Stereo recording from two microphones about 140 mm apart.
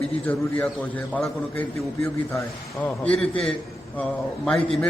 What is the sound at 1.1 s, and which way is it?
Speech, 5° left (ahead or behind).